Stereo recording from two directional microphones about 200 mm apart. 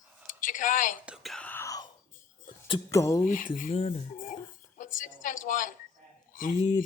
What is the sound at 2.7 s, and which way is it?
Speech, 15° left (ahead or behind).